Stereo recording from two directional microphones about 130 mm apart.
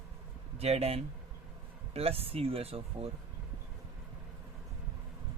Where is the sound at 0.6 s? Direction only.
50° right (ahead or behind).